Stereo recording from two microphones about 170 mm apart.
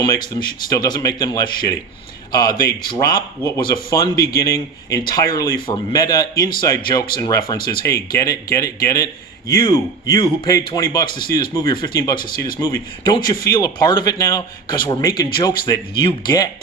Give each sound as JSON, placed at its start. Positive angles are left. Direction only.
{"t": 0.0, "sound": "speech", "side_deg": 25}